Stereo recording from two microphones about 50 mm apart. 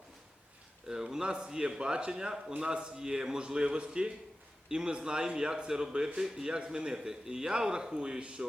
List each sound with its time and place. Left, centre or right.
0.9 s a man's voice: centre